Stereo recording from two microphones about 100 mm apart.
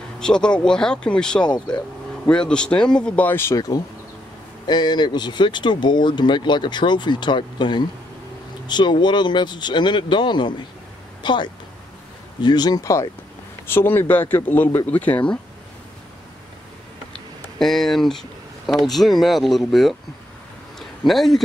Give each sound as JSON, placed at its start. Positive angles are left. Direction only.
{"t": 0.2, "sound": "speech", "side_deg": 10}
{"t": 3.5, "sound": "speech", "side_deg": 40}
{"t": 13.7, "sound": "speech", "side_deg": 20}
{"t": 17.1, "sound": "a sound", "side_deg": 5}
{"t": 18.7, "sound": "speech", "side_deg": 0}
{"t": 21.1, "sound": "speech", "side_deg": 0}